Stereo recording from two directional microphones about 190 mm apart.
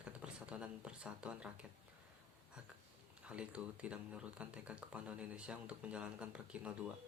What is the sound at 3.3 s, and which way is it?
Speech, 5° right (ahead or behind).